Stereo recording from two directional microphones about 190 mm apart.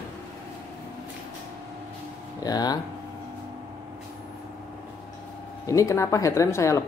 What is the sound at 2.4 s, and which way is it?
Speech, 20° left (ahead or behind).